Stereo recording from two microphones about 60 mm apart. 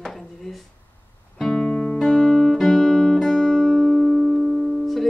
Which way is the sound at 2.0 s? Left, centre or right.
Centre.